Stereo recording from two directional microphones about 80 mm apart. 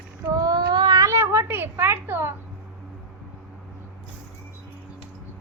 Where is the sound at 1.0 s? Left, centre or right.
Right.